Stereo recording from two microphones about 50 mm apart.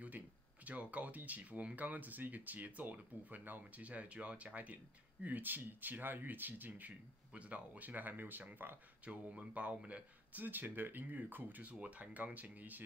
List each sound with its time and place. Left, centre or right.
0.7 s speech: right
7.3 s speech: right
9.0 s speech: right